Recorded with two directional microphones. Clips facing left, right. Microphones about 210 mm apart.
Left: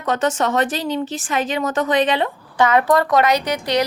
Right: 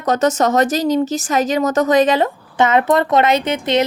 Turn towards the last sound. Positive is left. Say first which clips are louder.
# right 3 dB
turn(degrees=-25)  # may be behind; listen again after turning